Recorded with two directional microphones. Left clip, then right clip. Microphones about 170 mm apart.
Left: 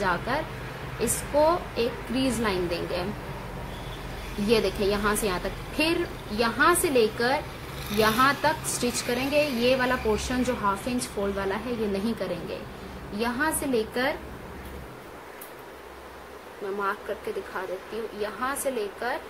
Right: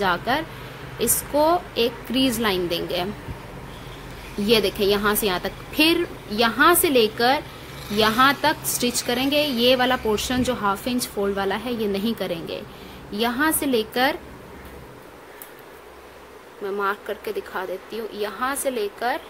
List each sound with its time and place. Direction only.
0.0 s a woman's voice: 40° right (ahead or behind)
4.5 s a woman's voice: 40° right (ahead or behind)
18.2 s a woman's voice: 40° right (ahead or behind)